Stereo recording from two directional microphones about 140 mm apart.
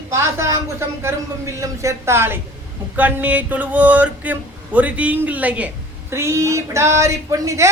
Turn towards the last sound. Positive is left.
turn(degrees=-25)  # may be behind; listen again after turning